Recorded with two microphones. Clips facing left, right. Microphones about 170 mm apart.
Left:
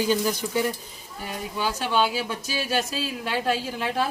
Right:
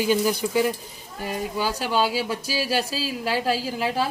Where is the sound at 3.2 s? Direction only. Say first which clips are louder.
Right 2 dB; 35° right (ahead or behind).